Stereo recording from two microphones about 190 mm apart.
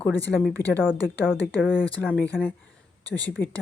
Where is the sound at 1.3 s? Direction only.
5° right (ahead or behind).